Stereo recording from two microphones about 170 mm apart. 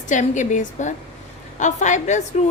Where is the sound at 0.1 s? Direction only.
45° left (ahead or behind).